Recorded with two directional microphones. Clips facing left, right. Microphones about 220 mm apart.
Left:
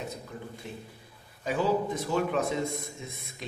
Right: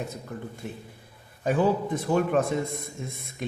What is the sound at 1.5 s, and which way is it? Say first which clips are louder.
A man's voice: right 4 dB; 50° right (ahead or behind).